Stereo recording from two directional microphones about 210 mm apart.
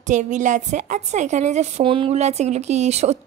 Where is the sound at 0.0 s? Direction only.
35° right (ahead or behind).